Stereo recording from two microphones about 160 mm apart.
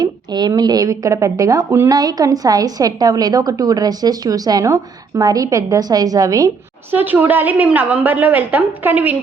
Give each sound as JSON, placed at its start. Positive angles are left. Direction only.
{"t": 0.0, "sound": "speech", "side_deg": -25}
{"t": 6.9, "sound": "a woman's voice", "side_deg": -10}